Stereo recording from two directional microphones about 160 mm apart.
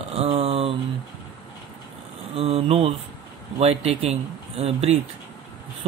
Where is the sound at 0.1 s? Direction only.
40° right (ahead or behind).